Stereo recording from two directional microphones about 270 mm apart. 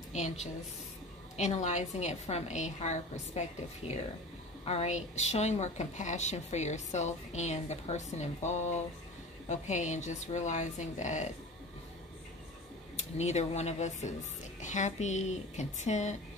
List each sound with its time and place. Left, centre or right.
0.1 s a woman's voice: left
12.9 s a woman's voice: left